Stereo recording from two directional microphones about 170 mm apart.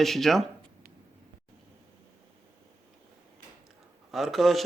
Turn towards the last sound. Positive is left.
turn(degrees=0)  # may be behind; listen again after turning